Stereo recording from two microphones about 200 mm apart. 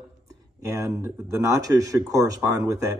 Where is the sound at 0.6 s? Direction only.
15° right (ahead or behind).